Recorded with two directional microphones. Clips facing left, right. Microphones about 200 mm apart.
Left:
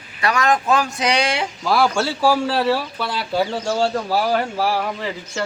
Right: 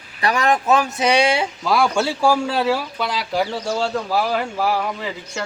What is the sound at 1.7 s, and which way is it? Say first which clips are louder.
Speech: even; 5° left (ahead or behind).